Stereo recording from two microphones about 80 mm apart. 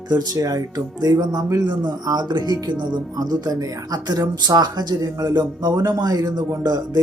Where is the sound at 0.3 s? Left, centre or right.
Right.